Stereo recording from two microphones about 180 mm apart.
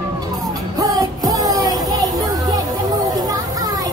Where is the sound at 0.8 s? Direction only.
20° right (ahead or behind).